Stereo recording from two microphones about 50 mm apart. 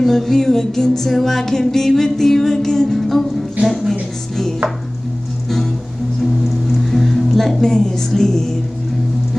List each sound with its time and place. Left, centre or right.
0.0 s music: centre
3.6 s a sound: centre
6.4 s music: centre